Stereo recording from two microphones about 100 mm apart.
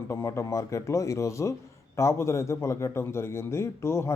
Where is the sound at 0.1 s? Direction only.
30° left (ahead or behind).